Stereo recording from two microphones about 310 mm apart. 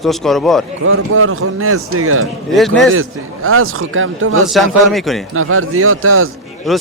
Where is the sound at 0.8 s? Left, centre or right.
Right.